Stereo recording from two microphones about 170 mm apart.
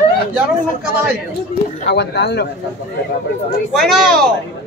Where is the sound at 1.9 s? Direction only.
80° left.